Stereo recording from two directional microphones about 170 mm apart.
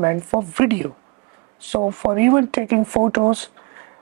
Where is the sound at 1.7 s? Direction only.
35° right (ahead or behind).